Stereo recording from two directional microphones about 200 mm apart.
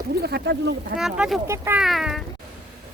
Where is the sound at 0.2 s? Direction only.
55° right (ahead or behind).